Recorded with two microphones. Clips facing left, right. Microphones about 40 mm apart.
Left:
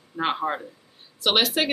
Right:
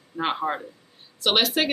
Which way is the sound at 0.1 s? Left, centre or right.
Centre.